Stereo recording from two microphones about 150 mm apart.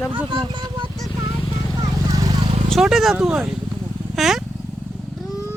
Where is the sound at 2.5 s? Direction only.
40° right (ahead or behind).